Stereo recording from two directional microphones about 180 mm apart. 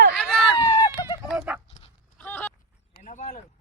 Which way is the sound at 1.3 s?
5° right (ahead or behind).